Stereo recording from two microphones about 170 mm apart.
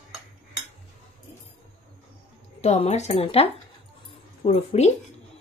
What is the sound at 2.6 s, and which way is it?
A woman's voice, 40° left (ahead or behind).